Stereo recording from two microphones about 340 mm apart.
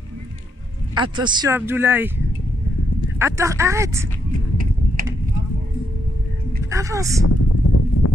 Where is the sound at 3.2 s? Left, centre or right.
Centre.